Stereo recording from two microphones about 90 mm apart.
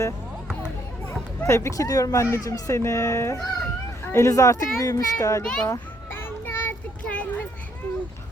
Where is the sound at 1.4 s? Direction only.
35° left (ahead or behind).